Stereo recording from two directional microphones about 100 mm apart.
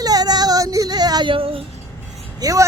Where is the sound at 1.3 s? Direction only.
65° right (ahead or behind).